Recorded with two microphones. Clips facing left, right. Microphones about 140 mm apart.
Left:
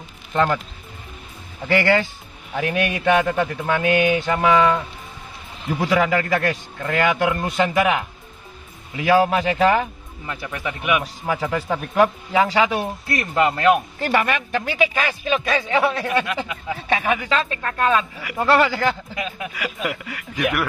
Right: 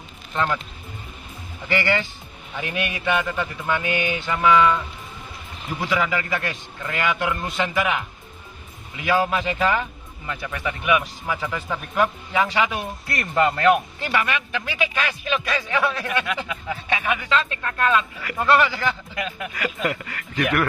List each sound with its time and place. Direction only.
0.3 s speech: 45° left (ahead or behind)
1.7 s speech: 45° left (ahead or behind)
10.2 s speech: 5° left (ahead or behind)
11.2 s speech: 35° left (ahead or behind)
13.0 s speech: centre (ahead or behind)
13.4 s speech: 20° left (ahead or behind)
14.0 s speech: 45° left (ahead or behind)
19.1 s speech: 10° left (ahead or behind)